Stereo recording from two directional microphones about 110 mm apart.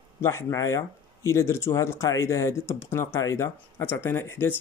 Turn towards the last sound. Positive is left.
turn(degrees=20)  # may be behind; listen again after turning